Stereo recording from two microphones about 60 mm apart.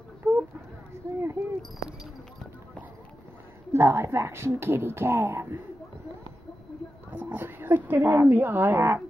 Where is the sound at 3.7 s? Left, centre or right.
Right.